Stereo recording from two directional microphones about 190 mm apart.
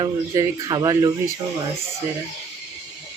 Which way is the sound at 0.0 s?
20° right (ahead or behind).